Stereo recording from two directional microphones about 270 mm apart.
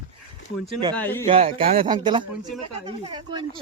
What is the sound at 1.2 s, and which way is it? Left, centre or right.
Speech, right.